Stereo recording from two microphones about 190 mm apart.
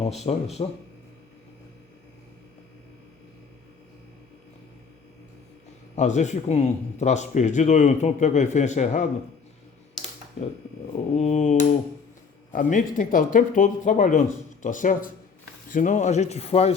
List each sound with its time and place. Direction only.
0.3 s speech: 35° left (ahead or behind)
6.0 s speech: 40° left (ahead or behind)
11.1 s speech: 35° left (ahead or behind)